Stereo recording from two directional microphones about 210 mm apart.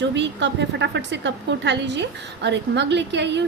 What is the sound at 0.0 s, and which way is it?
A woman's voice, 55° right (ahead or behind).